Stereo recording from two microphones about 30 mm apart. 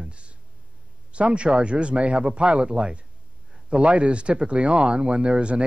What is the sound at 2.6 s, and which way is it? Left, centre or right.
Speech, right.